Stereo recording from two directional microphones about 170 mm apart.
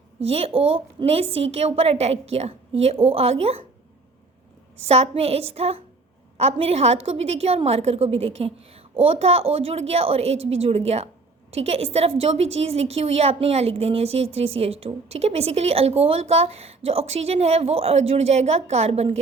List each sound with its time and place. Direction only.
0.2 s a woman's voice: 35° right (ahead or behind)
4.9 s a woman's voice: 35° right (ahead or behind)